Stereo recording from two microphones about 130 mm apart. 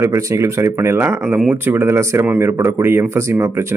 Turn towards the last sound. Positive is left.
turn(degrees=-20)  # may be behind; listen again after turning